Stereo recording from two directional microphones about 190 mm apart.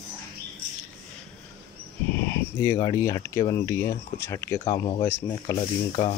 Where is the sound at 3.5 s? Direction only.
15° left (ahead or behind).